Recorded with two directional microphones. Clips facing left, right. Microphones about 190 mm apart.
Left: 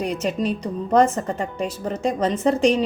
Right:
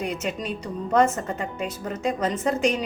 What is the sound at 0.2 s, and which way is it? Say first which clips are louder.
A woman's voice: left 6 dB; 35° left (ahead or behind).